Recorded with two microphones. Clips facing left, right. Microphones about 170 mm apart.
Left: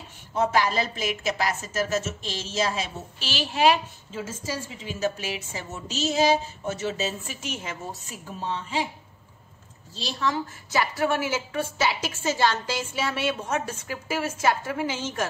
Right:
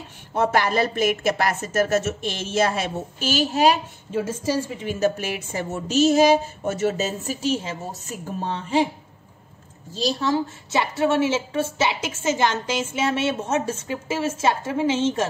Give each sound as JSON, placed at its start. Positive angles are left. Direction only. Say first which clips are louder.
{"t": 0.3, "sound": "speech", "louder": "right 3 dB", "side_deg": -55}
{"t": 4.1, "sound": "a woman's voice", "louder": "right 9 dB", "side_deg": -60}
{"t": 8.1, "sound": "speech", "louder": "right 4 dB", "side_deg": -50}
{"t": 9.9, "sound": "a woman's voice", "louder": "right 6 dB", "side_deg": -35}